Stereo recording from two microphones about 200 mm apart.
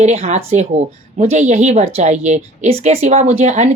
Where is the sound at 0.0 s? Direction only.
35° right (ahead or behind).